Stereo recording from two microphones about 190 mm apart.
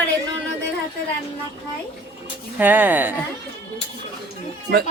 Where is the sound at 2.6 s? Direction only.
10° right (ahead or behind).